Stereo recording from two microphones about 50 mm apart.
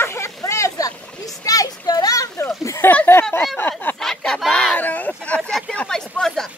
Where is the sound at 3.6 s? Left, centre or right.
Left.